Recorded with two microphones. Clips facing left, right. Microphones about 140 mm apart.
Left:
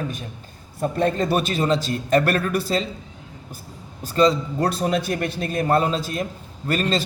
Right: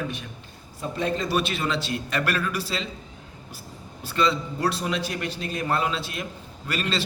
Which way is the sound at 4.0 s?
40° left (ahead or behind).